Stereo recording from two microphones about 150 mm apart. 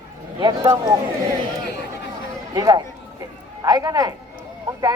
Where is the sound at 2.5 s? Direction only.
25° right (ahead or behind).